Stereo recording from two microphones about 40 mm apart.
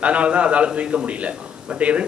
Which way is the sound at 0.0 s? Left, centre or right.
Right.